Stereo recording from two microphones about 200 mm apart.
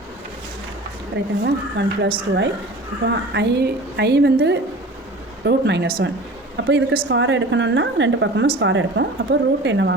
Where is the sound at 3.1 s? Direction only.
55° right (ahead or behind).